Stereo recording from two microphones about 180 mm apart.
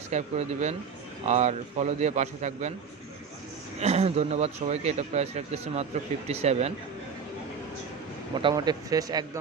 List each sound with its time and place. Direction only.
0.1 s a man's voice: 40° right (ahead or behind)
3.8 s a man's voice: 35° right (ahead or behind)
8.4 s speech: 25° right (ahead or behind)